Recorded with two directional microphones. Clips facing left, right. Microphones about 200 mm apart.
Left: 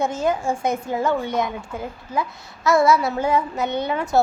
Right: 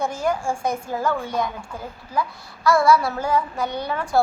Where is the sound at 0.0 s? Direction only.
20° left (ahead or behind).